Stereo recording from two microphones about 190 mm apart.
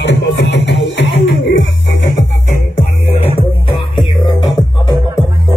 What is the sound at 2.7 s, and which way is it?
Music, 30° left (ahead or behind).